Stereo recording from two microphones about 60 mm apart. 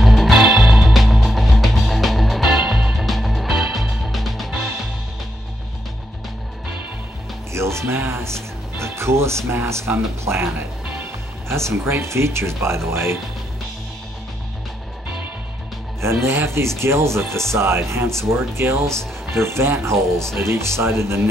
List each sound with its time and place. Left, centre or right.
0.0 s music: centre
7.5 s music: right
9.7 s speech: right
16.0 s speech: right